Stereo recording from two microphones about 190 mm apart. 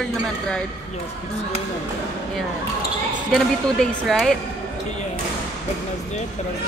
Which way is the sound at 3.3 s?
Centre (ahead or behind).